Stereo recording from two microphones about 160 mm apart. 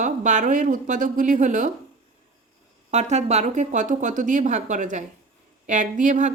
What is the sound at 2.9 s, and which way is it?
Speech, 45° right (ahead or behind).